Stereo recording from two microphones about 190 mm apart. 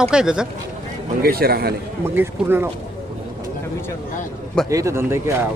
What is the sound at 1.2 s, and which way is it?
Speech, 55° right (ahead or behind).